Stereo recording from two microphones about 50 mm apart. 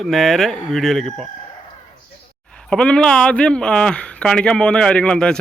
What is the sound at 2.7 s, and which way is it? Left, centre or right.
Speech, centre.